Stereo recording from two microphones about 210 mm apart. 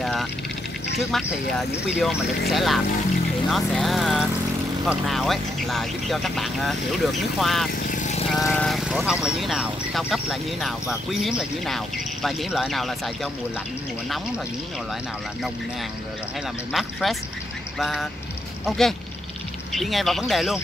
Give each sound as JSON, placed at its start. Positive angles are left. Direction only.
{"t": 0.0, "sound": "vehicle", "side_deg": 0}
{"t": 1.9, "sound": "speech", "side_deg": 0}
{"t": 7.9, "sound": "vehicle", "side_deg": 35}
{"t": 8.3, "sound": "speech", "side_deg": 5}
{"t": 16.7, "sound": "speech", "side_deg": 0}